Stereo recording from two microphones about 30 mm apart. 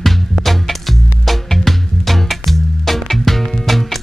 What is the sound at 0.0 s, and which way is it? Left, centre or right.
Music, centre.